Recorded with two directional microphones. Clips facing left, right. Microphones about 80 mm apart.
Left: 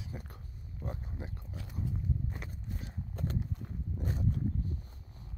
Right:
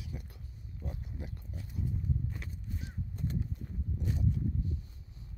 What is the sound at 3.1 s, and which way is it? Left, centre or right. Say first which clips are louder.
Horse: left 1 dB; left.